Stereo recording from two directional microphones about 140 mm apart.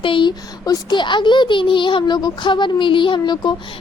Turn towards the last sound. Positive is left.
turn(degrees=35)  # may be behind; listen again after turning